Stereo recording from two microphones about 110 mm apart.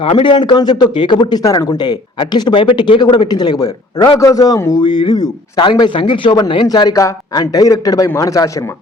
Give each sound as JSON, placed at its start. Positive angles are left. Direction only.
{"t": 0.0, "sound": "a man's voice", "side_deg": 50}
{"t": 4.8, "sound": "a man's voice", "side_deg": 45}